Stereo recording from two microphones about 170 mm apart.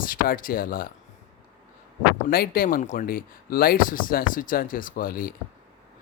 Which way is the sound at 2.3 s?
60° left (ahead or behind).